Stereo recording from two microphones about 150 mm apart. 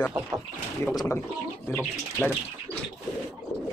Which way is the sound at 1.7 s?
5° left (ahead or behind).